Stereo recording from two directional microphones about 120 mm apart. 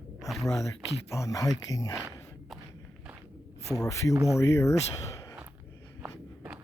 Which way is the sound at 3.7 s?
25° left (ahead or behind).